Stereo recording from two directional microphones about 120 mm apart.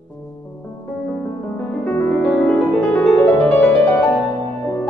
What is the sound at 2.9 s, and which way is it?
Music, 15° left (ahead or behind).